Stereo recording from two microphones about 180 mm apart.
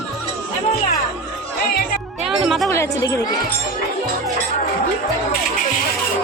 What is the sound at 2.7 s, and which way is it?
Speech, 15° left (ahead or behind).